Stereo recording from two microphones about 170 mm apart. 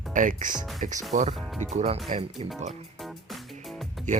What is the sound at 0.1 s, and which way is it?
Speech, 50° right (ahead or behind).